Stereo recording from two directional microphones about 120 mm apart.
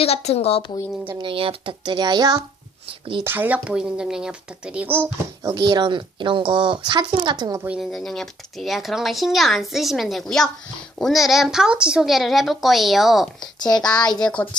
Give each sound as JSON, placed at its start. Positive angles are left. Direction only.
{"t": 0.0, "sound": "a woman's voice", "side_deg": 60}
{"t": 1.2, "sound": "speech", "side_deg": -50}
{"t": 3.2, "sound": "speech", "side_deg": -15}
{"t": 5.4, "sound": "speech", "side_deg": -35}
{"t": 7.8, "sound": "speech", "side_deg": 0}
{"t": 13.6, "sound": "a child's voice", "side_deg": 35}